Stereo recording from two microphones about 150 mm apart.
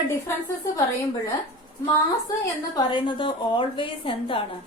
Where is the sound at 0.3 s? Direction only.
15° left (ahead or behind).